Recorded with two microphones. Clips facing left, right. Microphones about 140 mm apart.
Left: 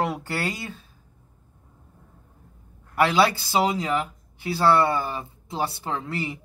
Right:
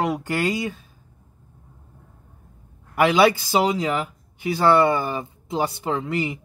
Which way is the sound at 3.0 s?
15° right (ahead or behind).